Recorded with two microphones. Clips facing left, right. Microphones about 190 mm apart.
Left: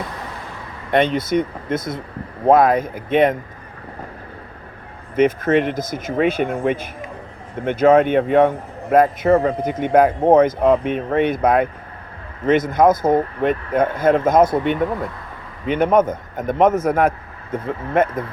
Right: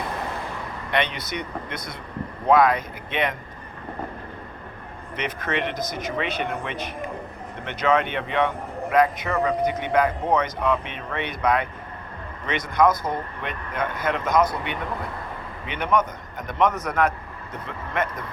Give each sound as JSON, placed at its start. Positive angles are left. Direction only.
{"t": 0.9, "sound": "speech", "side_deg": 45}
{"t": 5.1, "sound": "speech", "side_deg": 50}